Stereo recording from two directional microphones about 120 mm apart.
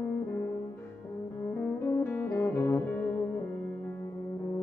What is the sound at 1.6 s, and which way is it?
Music, 15° left (ahead or behind).